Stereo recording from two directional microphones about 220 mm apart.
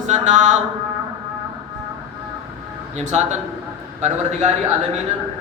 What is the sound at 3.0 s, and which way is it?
Speech, 30° right (ahead or behind).